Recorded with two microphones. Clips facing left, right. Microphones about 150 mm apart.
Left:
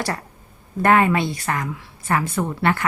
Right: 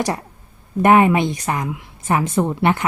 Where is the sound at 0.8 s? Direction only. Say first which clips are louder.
Right 4 dB; 15° right (ahead or behind).